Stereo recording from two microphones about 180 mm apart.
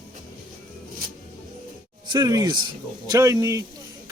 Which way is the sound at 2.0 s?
20° right (ahead or behind).